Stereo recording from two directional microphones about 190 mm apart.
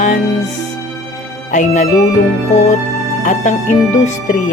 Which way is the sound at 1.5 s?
40° left (ahead or behind).